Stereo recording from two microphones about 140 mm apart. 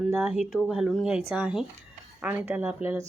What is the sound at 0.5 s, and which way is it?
Speech, 5° right (ahead or behind).